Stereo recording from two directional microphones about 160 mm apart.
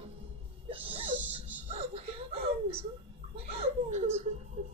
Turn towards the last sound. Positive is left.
turn(degrees=-40)  # may be behind; listen again after turning